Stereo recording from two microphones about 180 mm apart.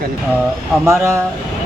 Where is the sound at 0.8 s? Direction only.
15° right (ahead or behind).